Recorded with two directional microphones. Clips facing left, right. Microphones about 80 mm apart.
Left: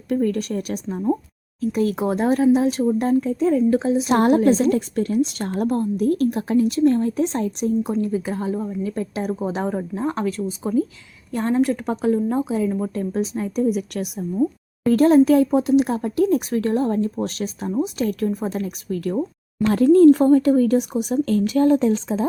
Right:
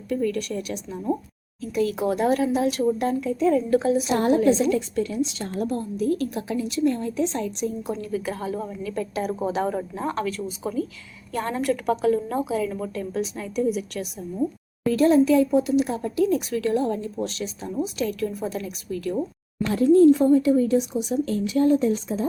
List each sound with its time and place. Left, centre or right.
0.2 s a woman's voice: left
3.5 s a woman's voice: left
4.4 s a woman's voice: left
17.7 s a woman's voice: left
19.7 s speech: left